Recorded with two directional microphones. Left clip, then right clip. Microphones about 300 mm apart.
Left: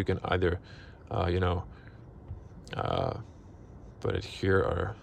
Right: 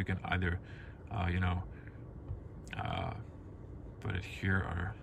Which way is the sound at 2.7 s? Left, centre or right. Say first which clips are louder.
Left 9 dB; centre.